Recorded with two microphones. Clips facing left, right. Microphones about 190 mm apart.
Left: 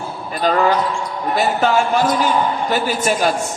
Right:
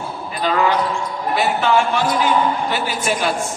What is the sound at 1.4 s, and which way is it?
A man's voice, 40° left (ahead or behind).